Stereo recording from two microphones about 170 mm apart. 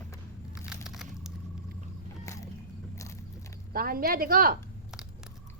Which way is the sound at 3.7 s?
60° right (ahead or behind).